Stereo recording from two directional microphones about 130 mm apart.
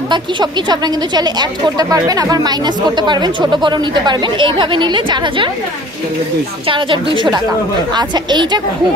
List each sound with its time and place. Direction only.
0.1 s a woman's voice: 35° right (ahead or behind)
6.7 s a woman's voice: 40° right (ahead or behind)